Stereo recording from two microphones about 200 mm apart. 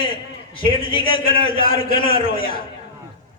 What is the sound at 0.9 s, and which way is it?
A man's voice, 25° left (ahead or behind).